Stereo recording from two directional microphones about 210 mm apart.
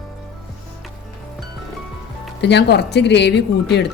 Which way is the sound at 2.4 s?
55° left (ahead or behind).